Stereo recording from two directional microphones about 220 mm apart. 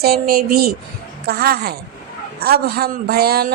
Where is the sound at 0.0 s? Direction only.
45° right (ahead or behind).